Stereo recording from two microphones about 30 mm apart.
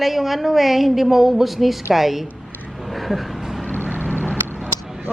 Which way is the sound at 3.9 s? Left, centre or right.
Left.